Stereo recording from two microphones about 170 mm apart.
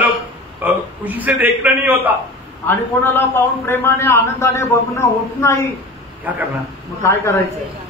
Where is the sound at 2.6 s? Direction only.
10° left (ahead or behind).